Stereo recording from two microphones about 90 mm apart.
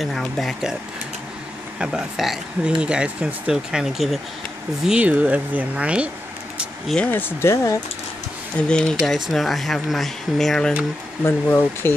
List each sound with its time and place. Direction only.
0.0 s speech: 5° left (ahead or behind)
1.8 s speech: 5° right (ahead or behind)
7.1 s speech: 20° left (ahead or behind)
8.5 s speech: 10° left (ahead or behind)
11.2 s speech: 25° left (ahead or behind)